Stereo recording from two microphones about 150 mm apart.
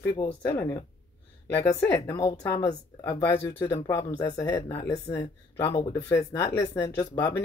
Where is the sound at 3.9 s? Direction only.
30° left (ahead or behind).